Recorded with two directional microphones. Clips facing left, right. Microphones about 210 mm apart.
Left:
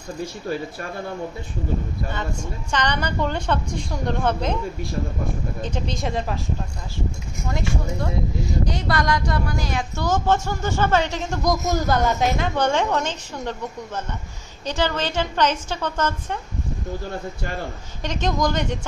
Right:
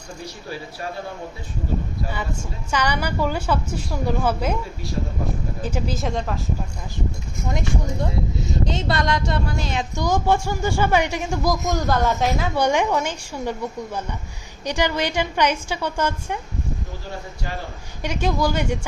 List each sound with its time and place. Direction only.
2.7 s speech: 10° right (ahead or behind)
5.6 s speech: 5° right (ahead or behind)
7.5 s speech: 20° right (ahead or behind)
11.5 s speech: centre (ahead or behind)
12.5 s speech: 10° right (ahead or behind)
18.0 s speech: 10° right (ahead or behind)